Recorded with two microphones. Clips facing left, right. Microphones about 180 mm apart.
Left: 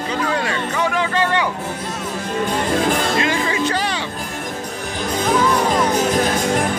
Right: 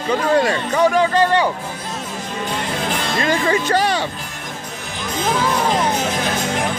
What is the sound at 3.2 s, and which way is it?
Speech, 45° right (ahead or behind).